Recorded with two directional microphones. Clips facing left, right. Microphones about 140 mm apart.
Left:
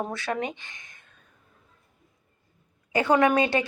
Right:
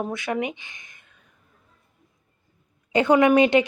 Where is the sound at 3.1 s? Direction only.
15° right (ahead or behind).